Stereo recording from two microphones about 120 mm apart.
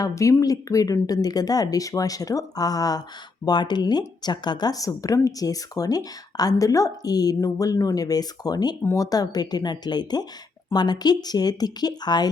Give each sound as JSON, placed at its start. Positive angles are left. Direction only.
{"t": 0.0, "sound": "speech", "side_deg": 25}